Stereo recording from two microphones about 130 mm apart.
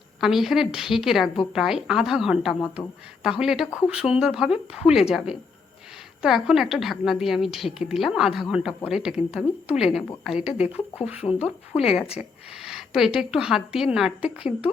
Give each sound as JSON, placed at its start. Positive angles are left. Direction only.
{"t": 0.2, "sound": "a woman's voice", "side_deg": 0}
{"t": 11.2, "sound": "speech", "side_deg": 50}
{"t": 12.6, "sound": "a sound", "side_deg": -5}
{"t": 13.1, "sound": "a woman's voice", "side_deg": -5}